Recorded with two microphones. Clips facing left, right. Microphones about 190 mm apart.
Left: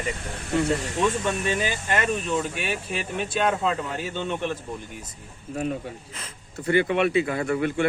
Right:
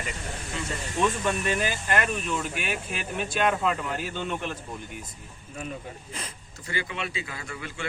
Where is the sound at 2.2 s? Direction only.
30° left (ahead or behind).